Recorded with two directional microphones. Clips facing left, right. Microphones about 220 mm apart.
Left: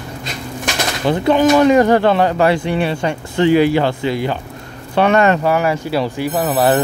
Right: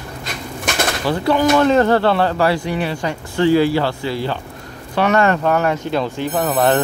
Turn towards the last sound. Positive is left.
turn(degrees=5)  # may be behind; listen again after turning